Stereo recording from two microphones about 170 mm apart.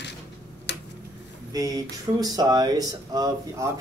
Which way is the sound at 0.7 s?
90° left.